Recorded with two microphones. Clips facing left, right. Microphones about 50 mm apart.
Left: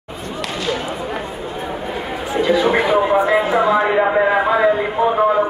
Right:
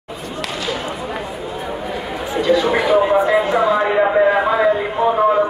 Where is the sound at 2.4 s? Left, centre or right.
Centre.